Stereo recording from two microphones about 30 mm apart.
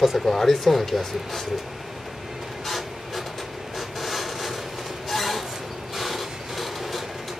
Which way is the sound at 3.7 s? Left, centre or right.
Centre.